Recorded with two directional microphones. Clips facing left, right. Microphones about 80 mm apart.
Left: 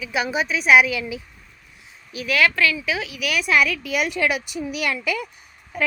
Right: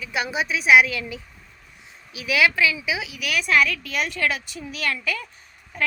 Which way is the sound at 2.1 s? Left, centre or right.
Centre.